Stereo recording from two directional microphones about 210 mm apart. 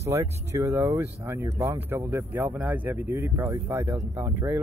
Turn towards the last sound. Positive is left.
turn(degrees=-10)  # may be behind; listen again after turning